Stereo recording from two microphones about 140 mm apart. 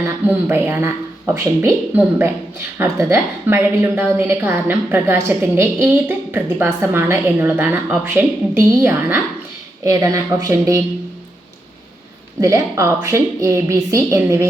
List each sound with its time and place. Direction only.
0.0 s a woman's voice: 15° right (ahead or behind)
12.4 s a woman's voice: 25° right (ahead or behind)